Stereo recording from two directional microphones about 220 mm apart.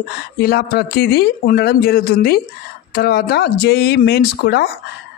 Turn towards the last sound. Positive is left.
turn(degrees=45)  # may be behind; listen again after turning